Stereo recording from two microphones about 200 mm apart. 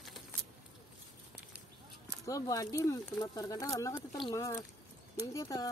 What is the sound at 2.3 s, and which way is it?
Speech, 15° left (ahead or behind).